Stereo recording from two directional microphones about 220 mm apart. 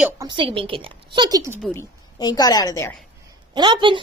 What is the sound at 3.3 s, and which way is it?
Speech, 20° right (ahead or behind).